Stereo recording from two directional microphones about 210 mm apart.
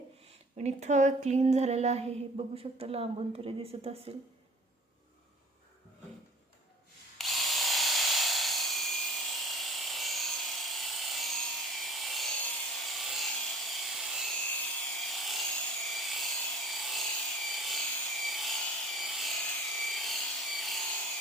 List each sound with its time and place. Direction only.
0.5 s female singing: 35° right (ahead or behind)
2.6 s speech: 30° right (ahead or behind)
7.2 s electric toothbrush: centre (ahead or behind)
12.8 s rub: centre (ahead or behind)
14.9 s a sound: centre (ahead or behind)